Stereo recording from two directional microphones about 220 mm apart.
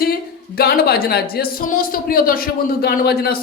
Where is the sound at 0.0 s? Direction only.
45° left (ahead or behind).